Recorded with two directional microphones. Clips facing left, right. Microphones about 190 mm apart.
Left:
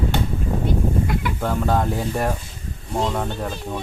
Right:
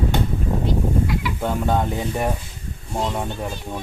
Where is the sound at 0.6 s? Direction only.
50° left (ahead or behind).